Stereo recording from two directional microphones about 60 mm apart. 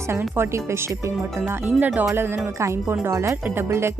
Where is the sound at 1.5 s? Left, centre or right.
Right.